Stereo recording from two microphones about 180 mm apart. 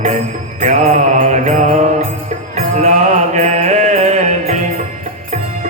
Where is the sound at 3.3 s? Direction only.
40° right (ahead or behind).